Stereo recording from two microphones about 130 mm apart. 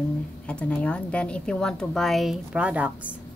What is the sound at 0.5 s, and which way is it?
A woman's voice, 10° left (ahead or behind).